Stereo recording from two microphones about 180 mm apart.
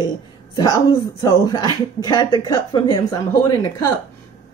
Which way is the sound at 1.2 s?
20° left (ahead or behind).